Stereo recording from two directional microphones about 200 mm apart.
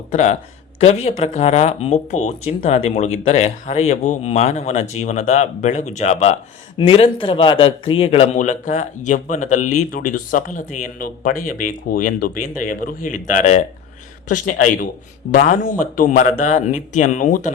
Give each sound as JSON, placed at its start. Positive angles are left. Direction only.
{"t": 0.1, "sound": "a man's voice", "side_deg": 35}